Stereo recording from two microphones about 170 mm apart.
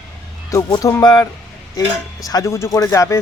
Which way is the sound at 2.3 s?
20° left (ahead or behind).